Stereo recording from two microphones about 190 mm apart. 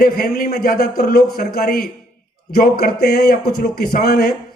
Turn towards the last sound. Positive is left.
turn(degrees=55)  # may be behind; listen again after turning